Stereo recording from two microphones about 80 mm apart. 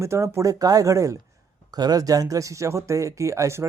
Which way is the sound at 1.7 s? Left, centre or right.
Right.